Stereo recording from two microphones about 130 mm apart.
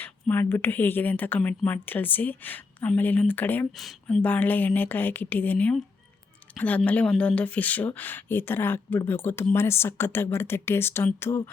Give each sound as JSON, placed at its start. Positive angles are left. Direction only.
{"t": 0.0, "sound": "speech", "side_deg": 15}
{"t": 3.7, "sound": "speech", "side_deg": 0}
{"t": 4.0, "sound": "speech", "side_deg": 10}